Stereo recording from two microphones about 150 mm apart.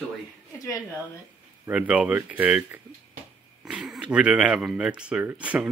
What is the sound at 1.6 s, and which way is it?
Speech, 10° right (ahead or behind).